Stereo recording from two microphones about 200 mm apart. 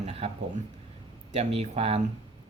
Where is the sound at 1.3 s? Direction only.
30° right (ahead or behind).